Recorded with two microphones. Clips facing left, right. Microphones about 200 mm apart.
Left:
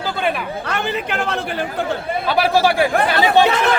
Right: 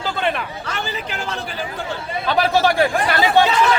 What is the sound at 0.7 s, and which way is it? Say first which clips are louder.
Speech: left 6 dB; 60° left (ahead or behind).